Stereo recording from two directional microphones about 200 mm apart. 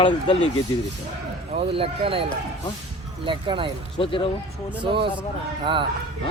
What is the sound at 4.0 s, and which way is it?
Speech, 25° left (ahead or behind).